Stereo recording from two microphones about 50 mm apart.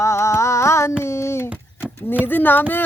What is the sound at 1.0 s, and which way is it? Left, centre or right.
Speech, left.